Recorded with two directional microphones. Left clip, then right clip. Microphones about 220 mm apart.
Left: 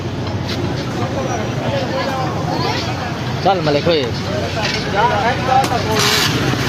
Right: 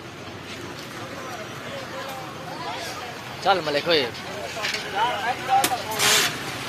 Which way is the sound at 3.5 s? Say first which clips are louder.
Left 6 dB; 20° right (ahead or behind).